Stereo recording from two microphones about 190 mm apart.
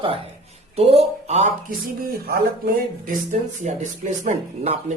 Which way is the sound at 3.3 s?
40° right (ahead or behind).